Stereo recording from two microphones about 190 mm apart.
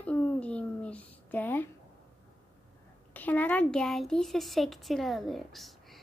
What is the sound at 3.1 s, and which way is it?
A woman's voice, 10° left (ahead or behind).